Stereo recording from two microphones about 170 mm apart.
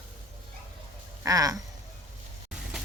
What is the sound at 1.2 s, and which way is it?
Speech, 20° right (ahead or behind).